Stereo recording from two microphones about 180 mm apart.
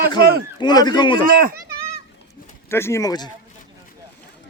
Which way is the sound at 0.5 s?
25° left (ahead or behind).